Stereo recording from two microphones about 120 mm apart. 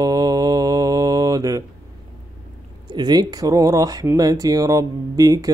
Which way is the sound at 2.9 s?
35° right (ahead or behind).